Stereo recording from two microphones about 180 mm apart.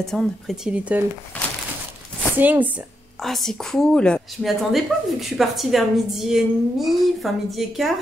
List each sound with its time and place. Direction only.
0.0 s a woman's voice: centre (ahead or behind)
1.3 s a sound: 10° left (ahead or behind)
2.3 s speech: 10° right (ahead or behind)
3.2 s a woman's voice: centre (ahead or behind)